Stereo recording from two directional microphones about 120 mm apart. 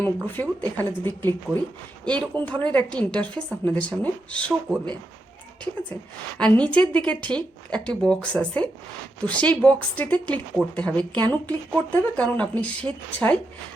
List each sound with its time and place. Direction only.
0.3 s a woman's voice: 15° left (ahead or behind)
6.4 s a woman's voice: 10° left (ahead or behind)